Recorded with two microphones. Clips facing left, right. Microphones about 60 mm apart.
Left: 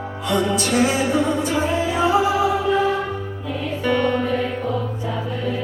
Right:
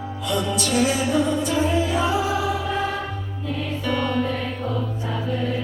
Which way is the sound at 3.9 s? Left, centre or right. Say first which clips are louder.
Left 4 dB; left.